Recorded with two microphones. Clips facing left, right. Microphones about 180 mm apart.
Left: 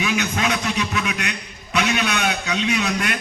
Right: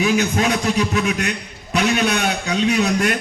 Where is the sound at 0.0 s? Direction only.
35° right (ahead or behind).